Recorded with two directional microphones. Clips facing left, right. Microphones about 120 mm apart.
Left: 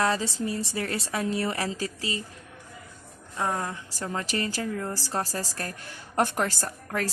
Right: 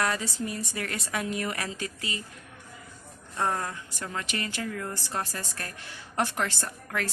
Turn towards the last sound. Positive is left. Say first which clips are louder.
# left 3 dB
turn(degrees=40)  # may be behind; listen again after turning